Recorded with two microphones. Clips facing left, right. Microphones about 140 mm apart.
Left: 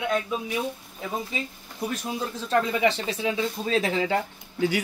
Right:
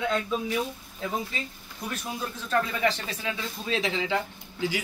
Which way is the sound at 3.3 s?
45° left (ahead or behind).